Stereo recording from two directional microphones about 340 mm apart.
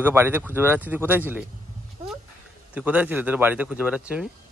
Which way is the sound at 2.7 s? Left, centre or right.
Centre.